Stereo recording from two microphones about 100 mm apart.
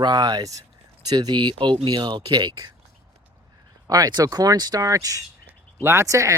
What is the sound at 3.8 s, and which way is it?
Speech, 40° right (ahead or behind).